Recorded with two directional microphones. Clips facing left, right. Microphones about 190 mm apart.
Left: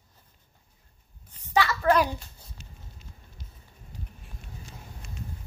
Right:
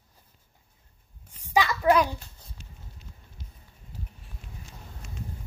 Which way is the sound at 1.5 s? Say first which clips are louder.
Right 1 dB; 15° right (ahead or behind).